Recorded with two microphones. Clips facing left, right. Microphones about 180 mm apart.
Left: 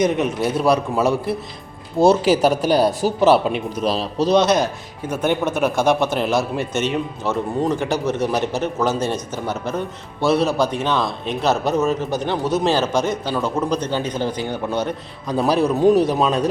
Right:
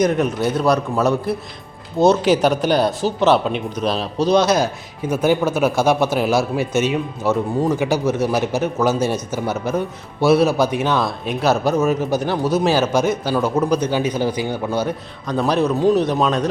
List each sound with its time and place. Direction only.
0.0 s a man's voice: 5° left (ahead or behind)
15.3 s a man's voice: 5° left (ahead or behind)